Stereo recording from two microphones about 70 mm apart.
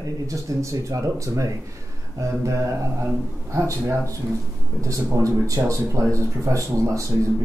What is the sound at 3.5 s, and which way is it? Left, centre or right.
Speech, right.